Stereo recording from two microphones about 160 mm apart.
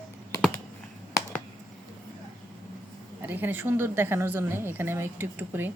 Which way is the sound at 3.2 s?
10° right (ahead or behind).